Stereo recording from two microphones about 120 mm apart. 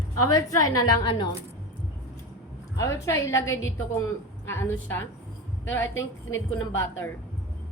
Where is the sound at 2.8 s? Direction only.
25° left (ahead or behind).